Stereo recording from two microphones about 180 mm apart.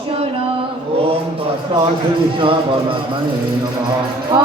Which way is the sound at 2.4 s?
30° right (ahead or behind).